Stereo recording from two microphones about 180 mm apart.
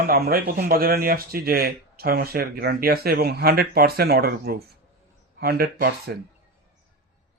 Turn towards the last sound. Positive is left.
turn(degrees=-60)  # may be behind; listen again after turning